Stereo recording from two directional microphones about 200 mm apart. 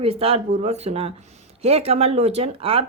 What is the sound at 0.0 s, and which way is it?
A woman's voice, 30° right (ahead or behind).